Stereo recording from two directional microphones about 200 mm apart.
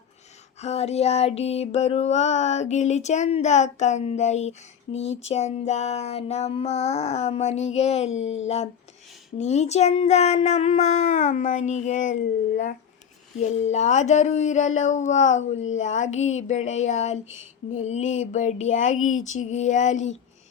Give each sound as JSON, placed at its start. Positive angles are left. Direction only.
{"t": 0.6, "sound": "music", "side_deg": 30}
{"t": 8.2, "sound": "speech", "side_deg": 70}
{"t": 9.4, "sound": "music", "side_deg": 35}
{"t": 13.4, "sound": "music", "side_deg": 35}